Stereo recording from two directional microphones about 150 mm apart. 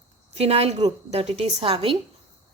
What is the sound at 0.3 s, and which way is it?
A woman's voice, 45° right (ahead or behind).